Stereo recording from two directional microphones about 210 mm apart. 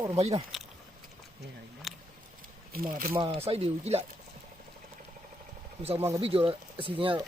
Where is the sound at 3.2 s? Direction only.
25° right (ahead or behind).